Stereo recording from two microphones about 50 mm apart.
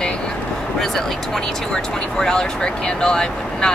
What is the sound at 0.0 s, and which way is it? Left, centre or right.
Vehicle, centre.